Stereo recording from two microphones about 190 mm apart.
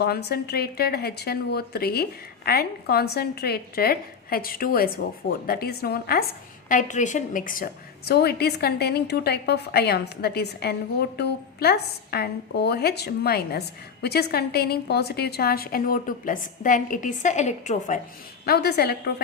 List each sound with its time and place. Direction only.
0.0 s a woman's voice: 55° left (ahead or behind)
6.7 s a woman's voice: 40° left (ahead or behind)
18.4 s a woman's voice: 55° left (ahead or behind)